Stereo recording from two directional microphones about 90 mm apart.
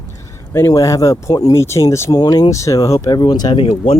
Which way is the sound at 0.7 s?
40° left (ahead or behind).